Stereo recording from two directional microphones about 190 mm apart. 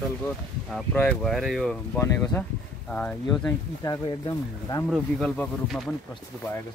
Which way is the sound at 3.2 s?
20° left (ahead or behind).